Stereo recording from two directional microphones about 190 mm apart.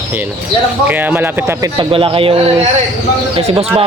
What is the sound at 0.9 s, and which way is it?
Speech, 10° right (ahead or behind).